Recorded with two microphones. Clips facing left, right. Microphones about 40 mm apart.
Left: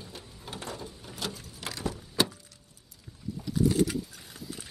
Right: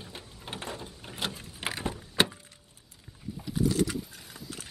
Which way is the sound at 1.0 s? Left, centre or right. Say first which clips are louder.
Right 4 dB; right.